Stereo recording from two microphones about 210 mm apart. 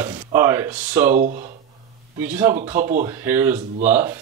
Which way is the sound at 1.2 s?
35° right (ahead or behind).